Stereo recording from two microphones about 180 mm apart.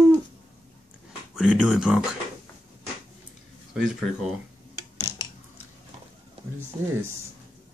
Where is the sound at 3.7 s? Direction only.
5° right (ahead or behind).